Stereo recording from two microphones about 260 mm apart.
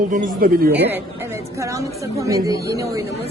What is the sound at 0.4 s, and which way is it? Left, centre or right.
Speech, right.